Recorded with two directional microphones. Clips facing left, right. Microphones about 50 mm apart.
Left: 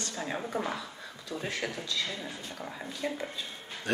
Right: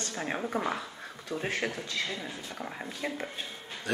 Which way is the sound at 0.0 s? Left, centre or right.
Right.